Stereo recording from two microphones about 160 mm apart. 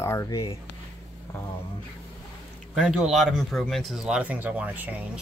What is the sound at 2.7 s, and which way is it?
Speech, centre (ahead or behind).